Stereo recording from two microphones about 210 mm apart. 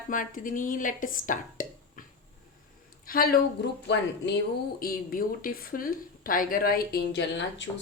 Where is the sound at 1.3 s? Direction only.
40° left (ahead or behind).